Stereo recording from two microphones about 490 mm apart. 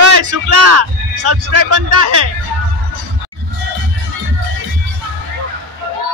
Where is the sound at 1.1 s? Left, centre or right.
Right.